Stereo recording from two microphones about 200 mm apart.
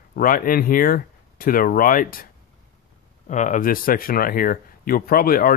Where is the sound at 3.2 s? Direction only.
35° left (ahead or behind).